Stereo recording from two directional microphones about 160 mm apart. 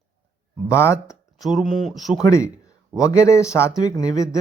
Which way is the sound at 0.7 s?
15° left (ahead or behind).